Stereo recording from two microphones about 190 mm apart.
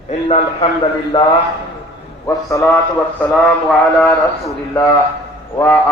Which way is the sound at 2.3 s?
15° left (ahead or behind).